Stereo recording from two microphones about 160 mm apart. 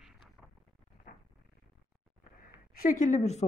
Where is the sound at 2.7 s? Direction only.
60° left (ahead or behind); by 3.4 s 45° left (ahead or behind).